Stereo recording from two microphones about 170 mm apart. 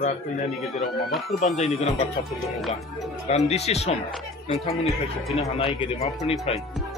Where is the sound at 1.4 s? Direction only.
40° left (ahead or behind).